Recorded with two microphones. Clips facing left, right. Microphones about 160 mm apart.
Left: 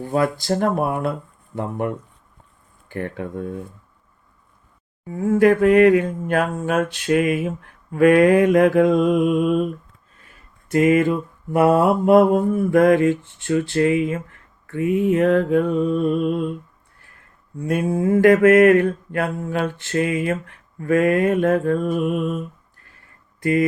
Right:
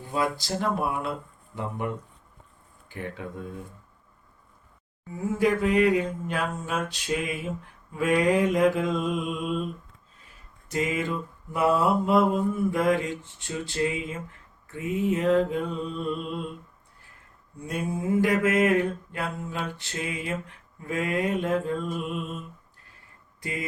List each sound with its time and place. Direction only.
0.0 s speech: 55° left (ahead or behind)
2.9 s mantra: 55° left (ahead or behind)
5.2 s mantra: 55° left (ahead or behind)
10.7 s mantra: 60° left (ahead or behind)
17.7 s mantra: 60° left (ahead or behind)
23.4 s speech: 55° left (ahead or behind)